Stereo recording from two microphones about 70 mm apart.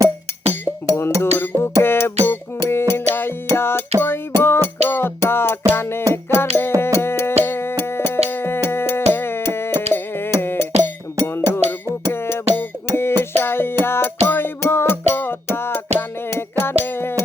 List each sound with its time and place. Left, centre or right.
0.9 s speech: left
1.5 s music: left
7.0 s a sound: left
12.0 s music: left